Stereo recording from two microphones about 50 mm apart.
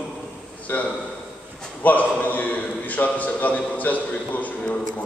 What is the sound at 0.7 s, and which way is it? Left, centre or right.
A man's voice, left.